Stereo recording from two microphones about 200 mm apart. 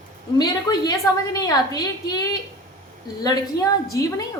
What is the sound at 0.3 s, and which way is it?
A woman's voice, 20° left (ahead or behind).